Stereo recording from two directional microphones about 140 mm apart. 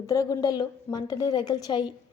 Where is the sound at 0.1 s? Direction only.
25° left (ahead or behind).